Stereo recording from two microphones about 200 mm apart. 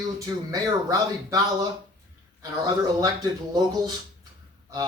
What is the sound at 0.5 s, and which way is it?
Speech, 15° right (ahead or behind).